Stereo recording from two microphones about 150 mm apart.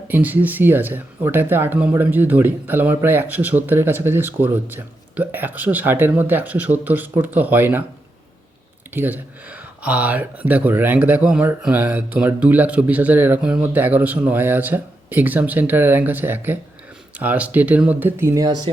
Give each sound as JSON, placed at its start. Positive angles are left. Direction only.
{"t": 0.1, "sound": "speech", "side_deg": -10}
{"t": 8.9, "sound": "speech", "side_deg": -15}
{"t": 18.4, "sound": "speech", "side_deg": -30}